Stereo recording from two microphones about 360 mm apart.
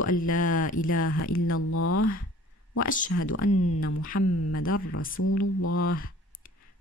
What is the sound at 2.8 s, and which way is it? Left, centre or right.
Speech, left.